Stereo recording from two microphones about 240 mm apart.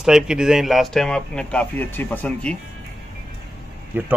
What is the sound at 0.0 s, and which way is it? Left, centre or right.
Speech, centre.